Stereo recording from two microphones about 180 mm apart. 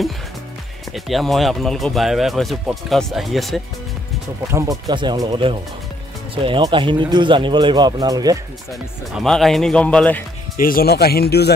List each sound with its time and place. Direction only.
0.9 s speech: centre (ahead or behind)
4.5 s speech: 15° right (ahead or behind)
9.1 s speech: centre (ahead or behind)
10.6 s speech: 55° left (ahead or behind)